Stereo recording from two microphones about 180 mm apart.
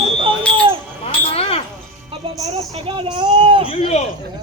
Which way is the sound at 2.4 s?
35° right (ahead or behind).